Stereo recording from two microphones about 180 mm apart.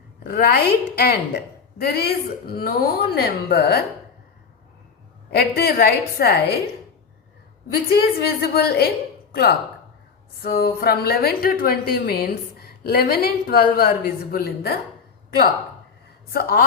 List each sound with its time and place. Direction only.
0.3 s a woman's voice: 60° left (ahead or behind)
5.3 s a woman's voice: 60° left (ahead or behind)
7.9 s a woman's voice: 60° left (ahead or behind)
16.3 s a woman's voice: 60° left (ahead or behind)